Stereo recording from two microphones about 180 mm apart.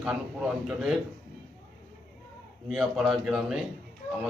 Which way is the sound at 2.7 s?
Centre (ahead or behind).